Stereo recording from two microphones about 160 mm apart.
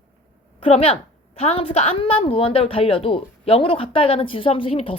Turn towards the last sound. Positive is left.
turn(degrees=35)  # may be behind; listen again after turning